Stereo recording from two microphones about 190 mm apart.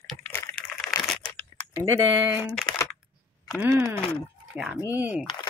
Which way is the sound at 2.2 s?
5° right (ahead or behind).